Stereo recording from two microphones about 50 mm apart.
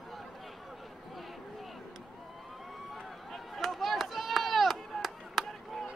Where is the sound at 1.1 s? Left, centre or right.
Centre.